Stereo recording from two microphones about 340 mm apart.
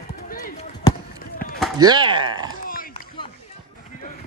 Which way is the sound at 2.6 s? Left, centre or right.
Left.